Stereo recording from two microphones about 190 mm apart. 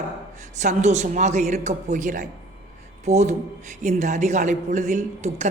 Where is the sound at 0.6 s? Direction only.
40° right (ahead or behind).